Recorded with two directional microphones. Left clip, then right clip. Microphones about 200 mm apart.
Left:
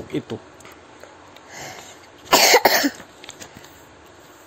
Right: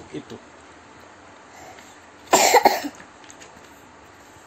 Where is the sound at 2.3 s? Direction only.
45° left (ahead or behind).